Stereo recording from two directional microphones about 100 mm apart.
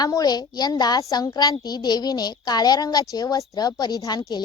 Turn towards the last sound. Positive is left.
turn(degrees=40)  # may be behind; listen again after turning